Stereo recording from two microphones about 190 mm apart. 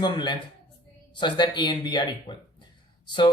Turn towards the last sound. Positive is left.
turn(degrees=25)  # may be behind; listen again after turning